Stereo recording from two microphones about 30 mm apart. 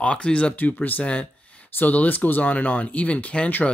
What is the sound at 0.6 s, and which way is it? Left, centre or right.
Speech, left.